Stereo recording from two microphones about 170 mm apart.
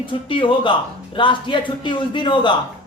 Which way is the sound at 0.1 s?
30° left (ahead or behind).